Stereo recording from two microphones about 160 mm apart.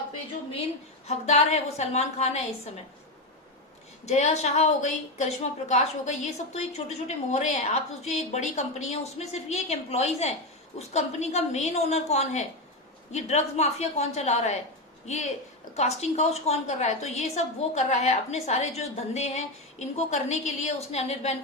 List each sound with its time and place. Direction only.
1.0 s a woman's voice: 45° left (ahead or behind)
4.0 s a woman's voice: 45° left (ahead or behind)